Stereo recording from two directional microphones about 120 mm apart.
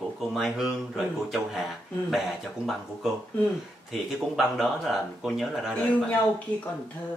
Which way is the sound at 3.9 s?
5° right (ahead or behind).